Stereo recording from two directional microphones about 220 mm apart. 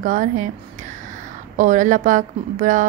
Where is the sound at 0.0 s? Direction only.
35° right (ahead or behind).